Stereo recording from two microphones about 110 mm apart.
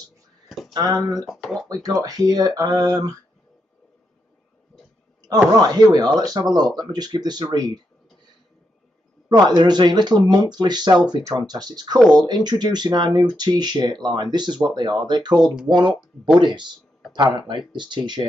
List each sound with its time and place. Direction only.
0.9 s speech: centre (ahead or behind)
1.7 s speech: 35° right (ahead or behind)
5.5 s speech: 35° right (ahead or behind)
9.3 s speech: 40° right (ahead or behind)